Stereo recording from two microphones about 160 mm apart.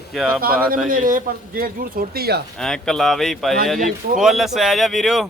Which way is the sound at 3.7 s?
55° right (ahead or behind).